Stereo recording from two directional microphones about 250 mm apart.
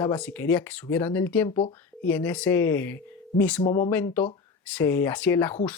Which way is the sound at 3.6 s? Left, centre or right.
Left.